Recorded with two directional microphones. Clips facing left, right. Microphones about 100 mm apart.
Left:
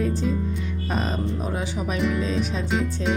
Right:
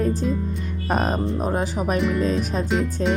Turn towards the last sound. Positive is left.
turn(degrees=0)  # may be behind; listen again after turning